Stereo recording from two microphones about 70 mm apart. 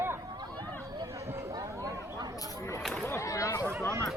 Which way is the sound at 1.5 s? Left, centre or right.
Right.